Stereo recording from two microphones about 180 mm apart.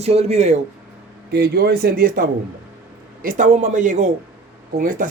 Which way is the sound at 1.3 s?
65° right (ahead or behind).